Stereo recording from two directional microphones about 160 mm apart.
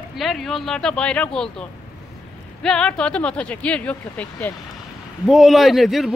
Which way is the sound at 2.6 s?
5° left (ahead or behind).